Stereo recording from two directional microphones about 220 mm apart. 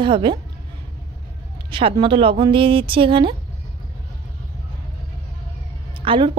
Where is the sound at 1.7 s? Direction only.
25° right (ahead or behind).